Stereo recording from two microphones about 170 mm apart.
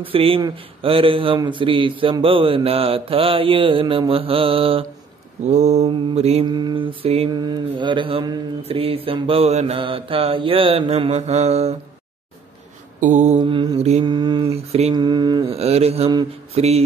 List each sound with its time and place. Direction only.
0.0 s mantra: 35° right (ahead or behind)
6.4 s mantra: 25° right (ahead or behind); by 11.7 s 40° right (ahead or behind)
13.0 s mantra: 45° right (ahead or behind)
13.4 s mantra: 25° right (ahead or behind)
14.0 s mantra: 25° right (ahead or behind)
15.5 s mantra: 35° right (ahead or behind)